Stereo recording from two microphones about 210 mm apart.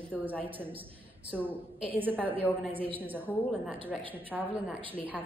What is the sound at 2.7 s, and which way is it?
Speech, 25° right (ahead or behind).